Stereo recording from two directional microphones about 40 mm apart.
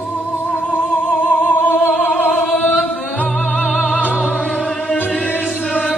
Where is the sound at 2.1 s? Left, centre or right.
Centre.